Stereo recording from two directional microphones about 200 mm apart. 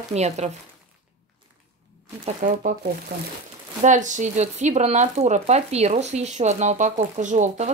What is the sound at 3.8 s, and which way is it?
Speech, 40° right (ahead or behind).